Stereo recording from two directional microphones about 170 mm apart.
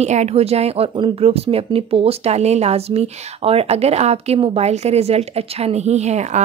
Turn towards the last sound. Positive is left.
turn(degrees=-40)  # may be behind; listen again after turning